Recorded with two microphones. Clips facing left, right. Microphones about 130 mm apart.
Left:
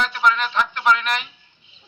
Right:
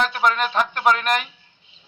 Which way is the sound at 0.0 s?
45° right (ahead or behind).